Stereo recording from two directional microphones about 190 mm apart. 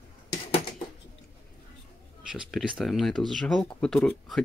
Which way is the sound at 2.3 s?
Centre (ahead or behind).